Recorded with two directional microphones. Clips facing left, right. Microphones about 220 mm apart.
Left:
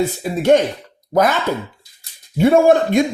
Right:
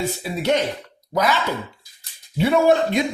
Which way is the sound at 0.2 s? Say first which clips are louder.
Left 8 dB; 50° left (ahead or behind).